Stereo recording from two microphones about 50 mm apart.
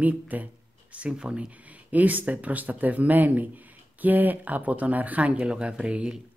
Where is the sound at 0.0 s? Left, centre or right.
Right.